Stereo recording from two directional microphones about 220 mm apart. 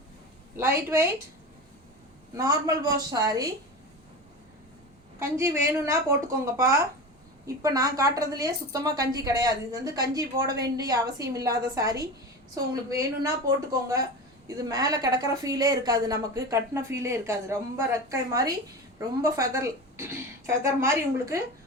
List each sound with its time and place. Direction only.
0.5 s a woman's voice: 10° right (ahead or behind)
2.3 s a woman's voice: 15° right (ahead or behind)
5.2 s a woman's voice: 15° right (ahead or behind)